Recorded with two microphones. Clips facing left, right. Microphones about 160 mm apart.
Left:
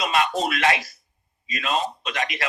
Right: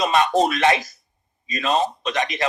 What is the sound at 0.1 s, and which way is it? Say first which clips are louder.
A man's voice: right 5 dB; 30° right (ahead or behind).